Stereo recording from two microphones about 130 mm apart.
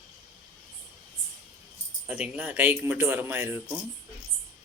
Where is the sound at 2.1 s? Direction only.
5° right (ahead or behind).